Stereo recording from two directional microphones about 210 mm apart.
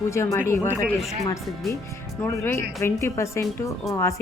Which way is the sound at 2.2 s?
10° left (ahead or behind).